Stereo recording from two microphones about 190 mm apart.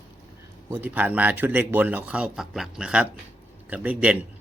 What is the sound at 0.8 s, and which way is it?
A man's voice, 10° right (ahead or behind).